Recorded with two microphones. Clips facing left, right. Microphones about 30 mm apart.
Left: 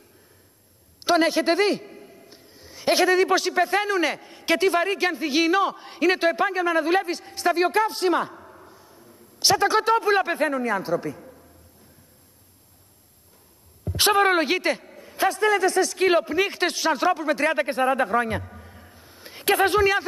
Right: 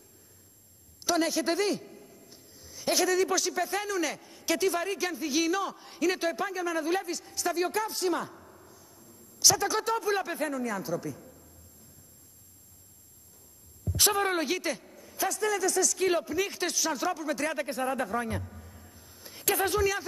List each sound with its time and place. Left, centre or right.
1.0 s a man's voice: left
13.8 s a woman's voice: left